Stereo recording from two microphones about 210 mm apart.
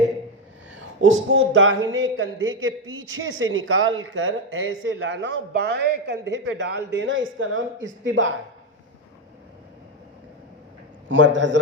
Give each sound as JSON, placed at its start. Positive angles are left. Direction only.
{"t": 0.7, "sound": "speech", "side_deg": -65}
{"t": 11.1, "sound": "a man's voice", "side_deg": -60}